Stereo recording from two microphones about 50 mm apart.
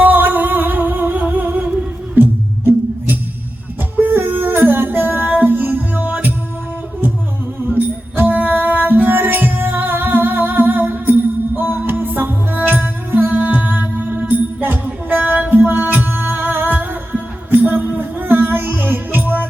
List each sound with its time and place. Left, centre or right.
0.0 s music: right
7.8 s music: right
13.3 s music: right